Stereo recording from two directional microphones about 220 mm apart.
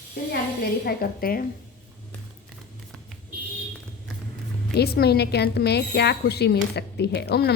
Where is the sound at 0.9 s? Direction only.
40° left (ahead or behind).